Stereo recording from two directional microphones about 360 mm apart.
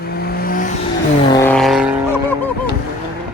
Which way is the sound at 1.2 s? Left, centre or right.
Centre.